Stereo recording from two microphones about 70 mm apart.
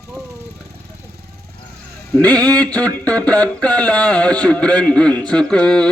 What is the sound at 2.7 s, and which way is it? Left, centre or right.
A man's voice, left.